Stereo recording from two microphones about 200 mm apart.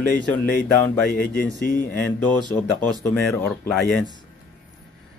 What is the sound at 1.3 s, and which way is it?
Speech, 45° left (ahead or behind).